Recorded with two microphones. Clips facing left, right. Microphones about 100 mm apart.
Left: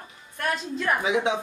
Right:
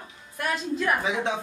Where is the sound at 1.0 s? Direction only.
15° left (ahead or behind).